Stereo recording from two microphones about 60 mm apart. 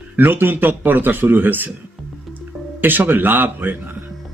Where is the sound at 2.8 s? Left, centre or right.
Right.